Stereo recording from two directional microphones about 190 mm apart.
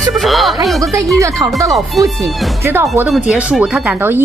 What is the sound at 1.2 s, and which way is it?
Speech, 15° right (ahead or behind).